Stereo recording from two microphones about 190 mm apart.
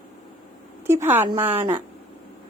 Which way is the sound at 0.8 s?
10° right (ahead or behind).